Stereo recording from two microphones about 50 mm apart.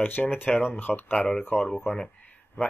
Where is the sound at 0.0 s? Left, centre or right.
Left.